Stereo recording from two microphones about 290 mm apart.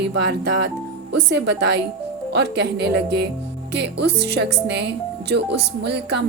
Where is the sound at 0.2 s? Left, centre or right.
Right.